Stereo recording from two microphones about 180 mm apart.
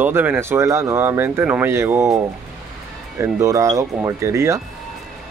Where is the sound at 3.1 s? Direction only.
15° right (ahead or behind).